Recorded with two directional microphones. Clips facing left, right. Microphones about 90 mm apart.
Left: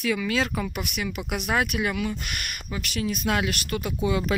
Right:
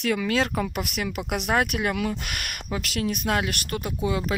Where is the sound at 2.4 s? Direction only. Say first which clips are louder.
Right 3 dB; 85° right.